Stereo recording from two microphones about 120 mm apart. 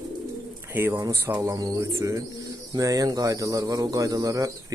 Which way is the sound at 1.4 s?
30° right (ahead or behind).